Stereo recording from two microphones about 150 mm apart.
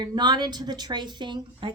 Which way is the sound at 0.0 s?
30° right (ahead or behind).